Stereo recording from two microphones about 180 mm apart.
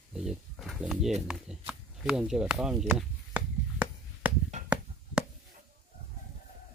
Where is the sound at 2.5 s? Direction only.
10° right (ahead or behind).